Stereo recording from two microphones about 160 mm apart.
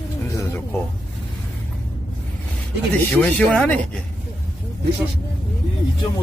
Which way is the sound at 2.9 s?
5° left (ahead or behind).